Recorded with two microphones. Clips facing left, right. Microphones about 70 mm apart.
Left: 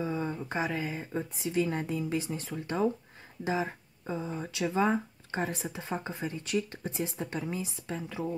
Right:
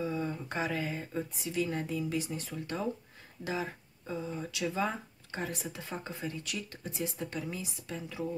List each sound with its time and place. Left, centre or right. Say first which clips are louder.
0.0 s a sound: left 2 dB; left
0.5 s speech: left 1 dB; centre
1.1 s speech: left 6 dB; left
4.6 s speech: left 6 dB; left